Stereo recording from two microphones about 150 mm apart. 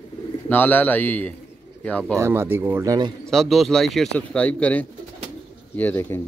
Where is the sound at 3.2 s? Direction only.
Centre (ahead or behind).